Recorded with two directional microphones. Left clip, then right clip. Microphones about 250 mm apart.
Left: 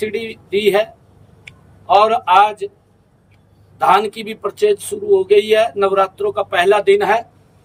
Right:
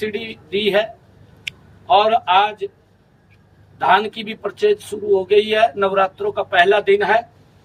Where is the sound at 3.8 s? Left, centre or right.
Centre.